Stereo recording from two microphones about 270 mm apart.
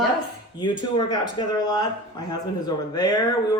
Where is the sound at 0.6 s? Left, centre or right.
Centre.